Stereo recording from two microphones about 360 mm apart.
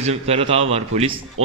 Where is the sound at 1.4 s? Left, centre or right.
Right.